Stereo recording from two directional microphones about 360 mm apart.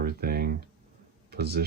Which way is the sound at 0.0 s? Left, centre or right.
Right.